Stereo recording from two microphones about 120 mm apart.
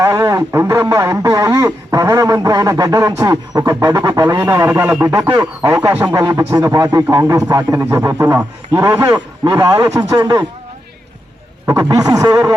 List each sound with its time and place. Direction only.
0.0 s speech: 25° right (ahead or behind)
5.4 s speech: 30° right (ahead or behind)
5.9 s speech: 15° right (ahead or behind)
6.1 s a man's voice: 35° right (ahead or behind)
11.6 s speech: 25° right (ahead or behind)